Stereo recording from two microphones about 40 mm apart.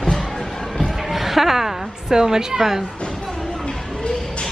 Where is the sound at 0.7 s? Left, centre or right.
Centre.